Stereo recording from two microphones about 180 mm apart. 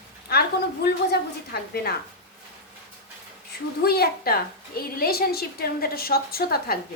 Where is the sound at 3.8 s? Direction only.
60° left (ahead or behind).